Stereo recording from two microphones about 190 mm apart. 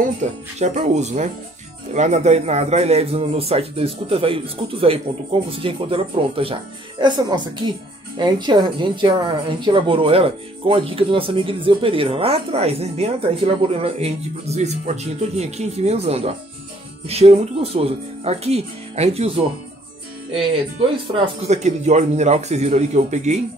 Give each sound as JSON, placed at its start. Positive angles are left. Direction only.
{"t": 0.0, "sound": "a man's voice", "side_deg": -40}
{"t": 21.4, "sound": "speech", "side_deg": -35}